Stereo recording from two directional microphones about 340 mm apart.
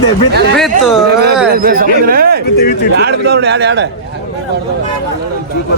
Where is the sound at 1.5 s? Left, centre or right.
Right.